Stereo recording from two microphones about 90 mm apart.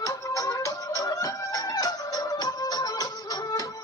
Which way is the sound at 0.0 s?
40° left (ahead or behind).